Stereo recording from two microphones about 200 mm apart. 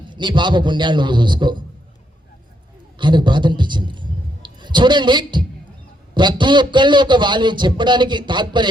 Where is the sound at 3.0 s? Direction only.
25° right (ahead or behind).